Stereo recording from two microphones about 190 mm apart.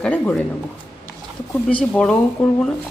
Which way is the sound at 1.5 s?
5° left (ahead or behind).